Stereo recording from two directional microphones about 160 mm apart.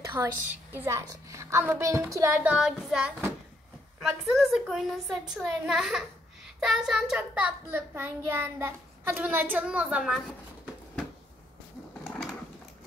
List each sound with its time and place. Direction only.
0.2 s child singing: 15° right (ahead or behind)
4.0 s a woman's voice: centre (ahead or behind)
6.6 s child singing: 5° right (ahead or behind)
12.0 s a sound: centre (ahead or behind)